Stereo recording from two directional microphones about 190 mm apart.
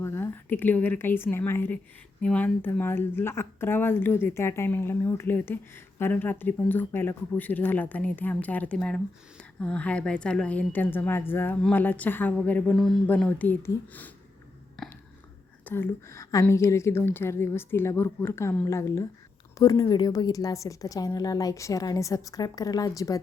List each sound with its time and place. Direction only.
0.0 s speech: 10° left (ahead or behind)
15.6 s a woman's voice: 10° left (ahead or behind)